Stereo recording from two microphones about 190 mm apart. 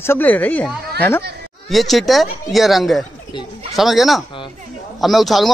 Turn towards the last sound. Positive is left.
turn(degrees=0)  # may be behind; listen again after turning